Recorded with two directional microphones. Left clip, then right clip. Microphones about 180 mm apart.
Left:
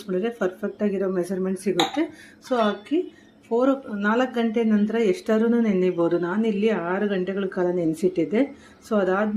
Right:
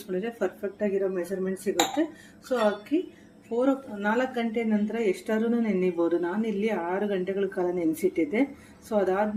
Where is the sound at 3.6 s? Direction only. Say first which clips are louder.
Left 4 dB; 20° left (ahead or behind).